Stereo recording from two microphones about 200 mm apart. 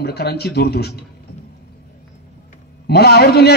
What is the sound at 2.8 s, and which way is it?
Speech, 50° left (ahead or behind).